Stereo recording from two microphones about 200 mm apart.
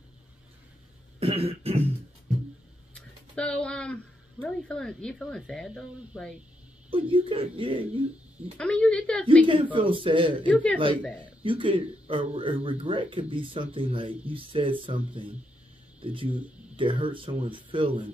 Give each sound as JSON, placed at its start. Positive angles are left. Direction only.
{"t": 1.2, "sound": "throat clearing", "side_deg": -30}
{"t": 2.9, "sound": "speech", "side_deg": 5}
{"t": 6.9, "sound": "speech", "side_deg": -25}
{"t": 8.5, "sound": "a woman's voice", "side_deg": 5}
{"t": 9.5, "sound": "speech", "side_deg": -25}
{"t": 10.5, "sound": "speech", "side_deg": 5}
{"t": 11.4, "sound": "speech", "side_deg": -25}